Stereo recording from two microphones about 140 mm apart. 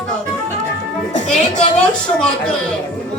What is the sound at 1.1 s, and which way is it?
Music, 55° left (ahead or behind).